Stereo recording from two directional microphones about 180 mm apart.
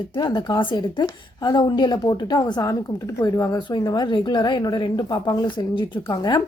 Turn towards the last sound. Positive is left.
turn(degrees=20)  # may be behind; listen again after turning